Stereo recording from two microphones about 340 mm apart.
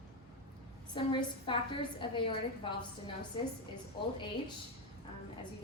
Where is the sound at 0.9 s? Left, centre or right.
Centre.